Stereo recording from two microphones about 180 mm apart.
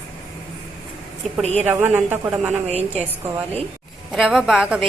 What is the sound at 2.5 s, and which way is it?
Speech, 35° right (ahead or behind).